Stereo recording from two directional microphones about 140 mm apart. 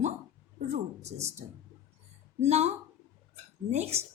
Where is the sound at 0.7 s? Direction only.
50° right (ahead or behind).